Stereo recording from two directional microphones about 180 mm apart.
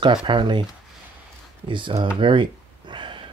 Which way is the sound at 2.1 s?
25° right (ahead or behind).